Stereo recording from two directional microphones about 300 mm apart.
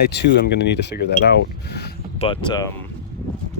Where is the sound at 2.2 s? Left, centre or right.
Centre.